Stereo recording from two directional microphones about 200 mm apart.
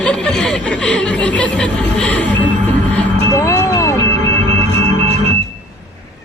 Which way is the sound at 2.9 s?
10° left (ahead or behind).